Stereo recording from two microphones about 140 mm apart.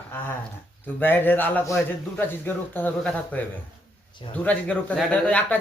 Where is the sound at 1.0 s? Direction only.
15° left (ahead or behind).